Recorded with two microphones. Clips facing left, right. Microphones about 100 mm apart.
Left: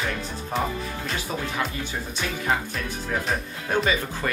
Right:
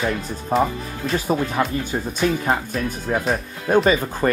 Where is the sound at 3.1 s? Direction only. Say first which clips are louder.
Right 5 dB; 35° right (ahead or behind).